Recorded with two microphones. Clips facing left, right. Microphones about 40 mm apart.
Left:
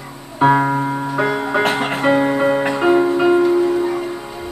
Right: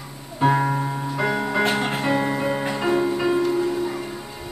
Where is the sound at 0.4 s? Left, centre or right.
Left.